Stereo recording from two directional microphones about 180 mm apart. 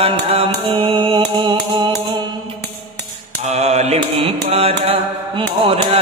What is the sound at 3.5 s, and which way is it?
Mantra, 35° right (ahead or behind).